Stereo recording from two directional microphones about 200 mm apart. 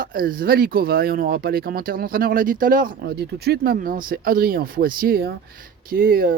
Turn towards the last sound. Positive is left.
turn(degrees=-45)  # may be behind; listen again after turning